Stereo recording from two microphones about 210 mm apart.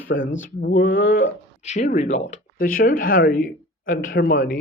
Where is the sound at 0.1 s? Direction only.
55° left (ahead or behind).